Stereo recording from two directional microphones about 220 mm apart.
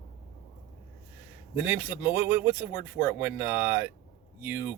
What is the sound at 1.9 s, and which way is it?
Speech, 10° right (ahead or behind).